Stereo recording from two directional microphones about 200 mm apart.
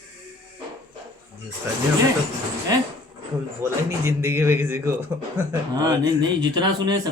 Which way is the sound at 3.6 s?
15° right (ahead or behind).